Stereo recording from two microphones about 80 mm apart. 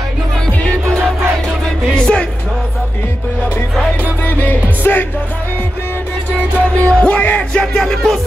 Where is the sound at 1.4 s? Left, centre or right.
Centre.